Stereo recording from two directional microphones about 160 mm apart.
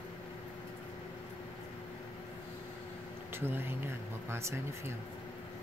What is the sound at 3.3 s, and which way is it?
Speech, 15° right (ahead or behind).